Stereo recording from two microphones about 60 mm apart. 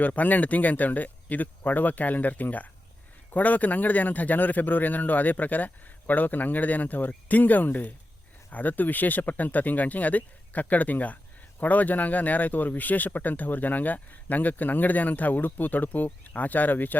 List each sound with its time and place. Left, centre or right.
0.0 s speech: left